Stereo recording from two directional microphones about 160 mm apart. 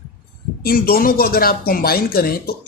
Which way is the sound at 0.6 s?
65° left (ahead or behind).